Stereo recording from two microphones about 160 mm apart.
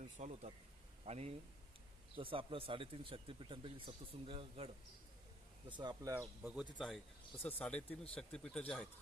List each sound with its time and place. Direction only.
0.2 s speech: 45° right (ahead or behind); by 8.9 s 5° left (ahead or behind)